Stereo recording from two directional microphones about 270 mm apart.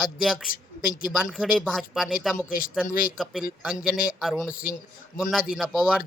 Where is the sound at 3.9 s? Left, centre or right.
Left.